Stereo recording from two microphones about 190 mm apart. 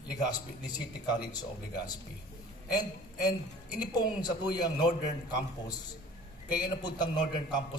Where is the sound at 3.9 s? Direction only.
20° left (ahead or behind).